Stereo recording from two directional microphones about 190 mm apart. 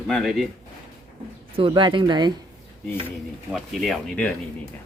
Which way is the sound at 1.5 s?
25° right (ahead or behind).